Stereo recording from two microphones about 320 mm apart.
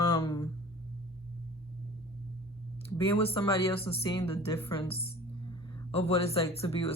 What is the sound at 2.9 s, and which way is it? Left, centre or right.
Speech, centre.